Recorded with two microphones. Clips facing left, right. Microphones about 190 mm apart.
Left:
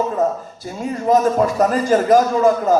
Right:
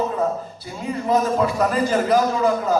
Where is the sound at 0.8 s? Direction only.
45° left (ahead or behind).